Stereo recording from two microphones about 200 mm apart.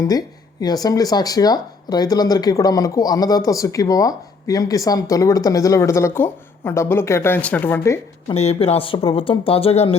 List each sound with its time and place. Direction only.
0.0 s speech: 20° left (ahead or behind)
8.3 s speech: 30° left (ahead or behind)